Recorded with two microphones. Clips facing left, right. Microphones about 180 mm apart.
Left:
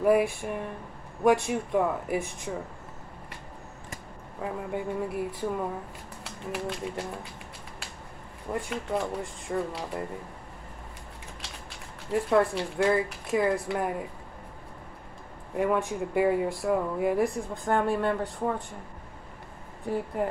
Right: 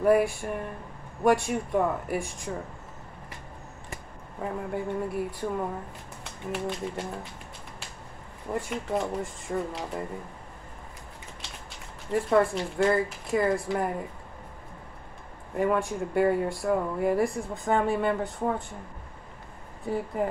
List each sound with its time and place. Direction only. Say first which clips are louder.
0.0 s speech: right 1 dB; centre (ahead or behind)
4.4 s speech: right 1 dB; centre (ahead or behind)
8.5 s speech: right 1 dB; centre (ahead or behind)
12.1 s speech: right 1 dB; centre (ahead or behind)
15.5 s speech: right 1 dB; centre (ahead or behind)